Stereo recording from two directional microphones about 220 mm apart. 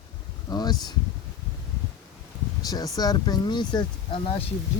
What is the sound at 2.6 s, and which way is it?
Speech, 15° left (ahead or behind).